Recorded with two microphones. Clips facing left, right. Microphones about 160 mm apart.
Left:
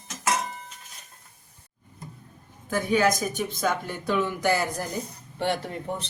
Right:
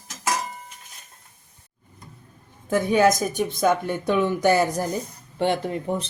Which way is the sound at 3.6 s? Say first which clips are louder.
Right 8 dB; 20° right (ahead or behind).